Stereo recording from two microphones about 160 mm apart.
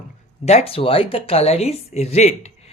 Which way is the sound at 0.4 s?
40° left (ahead or behind).